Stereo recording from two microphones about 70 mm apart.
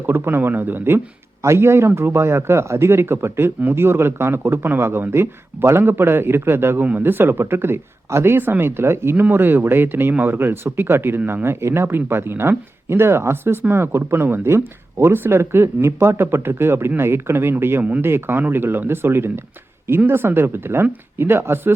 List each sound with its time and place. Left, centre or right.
0.0 s speech: right